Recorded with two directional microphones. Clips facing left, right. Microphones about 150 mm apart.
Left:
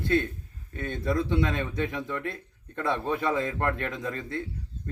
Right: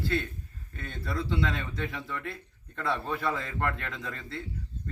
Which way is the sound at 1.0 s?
20° left (ahead or behind).